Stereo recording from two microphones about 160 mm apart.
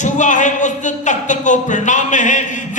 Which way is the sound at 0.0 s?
50° left (ahead or behind).